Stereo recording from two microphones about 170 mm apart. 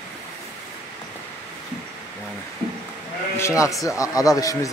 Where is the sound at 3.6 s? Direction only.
20° left (ahead or behind).